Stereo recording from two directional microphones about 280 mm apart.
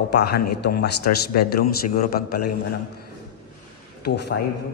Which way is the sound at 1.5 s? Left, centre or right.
Left.